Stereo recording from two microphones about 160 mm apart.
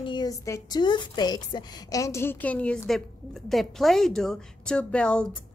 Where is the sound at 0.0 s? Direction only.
25° left (ahead or behind).